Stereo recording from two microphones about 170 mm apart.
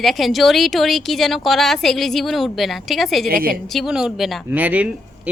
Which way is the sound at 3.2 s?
60° right (ahead or behind).